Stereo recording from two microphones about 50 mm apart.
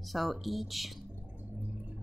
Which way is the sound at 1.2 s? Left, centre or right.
Right.